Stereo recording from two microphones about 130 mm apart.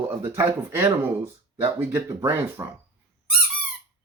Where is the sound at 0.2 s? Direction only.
20° right (ahead or behind).